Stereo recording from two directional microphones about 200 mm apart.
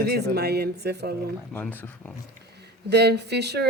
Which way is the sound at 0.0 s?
55° right (ahead or behind).